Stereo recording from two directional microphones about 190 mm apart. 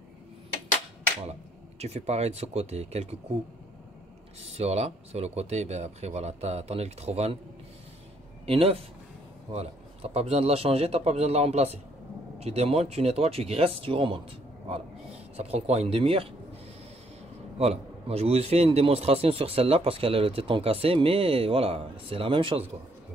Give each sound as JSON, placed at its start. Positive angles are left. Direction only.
{"t": 1.8, "sound": "a man's voice", "side_deg": -35}
{"t": 4.4, "sound": "a man's voice", "side_deg": -35}
{"t": 8.5, "sound": "a man's voice", "side_deg": -30}
{"t": 15.3, "sound": "a man's voice", "side_deg": -30}
{"t": 17.6, "sound": "a man's voice", "side_deg": -35}